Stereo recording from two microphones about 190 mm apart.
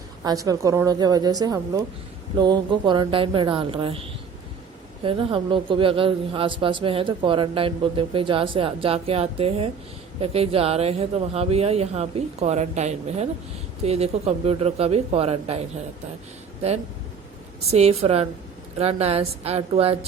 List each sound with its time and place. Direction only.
0.3 s speech: 20° right (ahead or behind)
5.0 s a woman's voice: 25° right (ahead or behind)
17.7 s a woman's voice: 35° right (ahead or behind)